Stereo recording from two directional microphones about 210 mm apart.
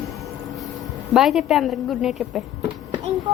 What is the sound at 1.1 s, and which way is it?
A woman's voice, centre (ahead or behind).